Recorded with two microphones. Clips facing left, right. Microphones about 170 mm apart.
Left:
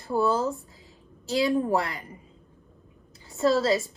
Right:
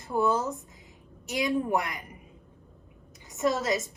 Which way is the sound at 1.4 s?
30° left (ahead or behind).